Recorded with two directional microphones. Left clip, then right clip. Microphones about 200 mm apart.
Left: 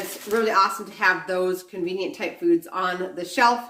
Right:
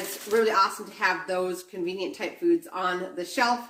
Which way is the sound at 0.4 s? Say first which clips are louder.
Left 3 dB; 15° left (ahead or behind).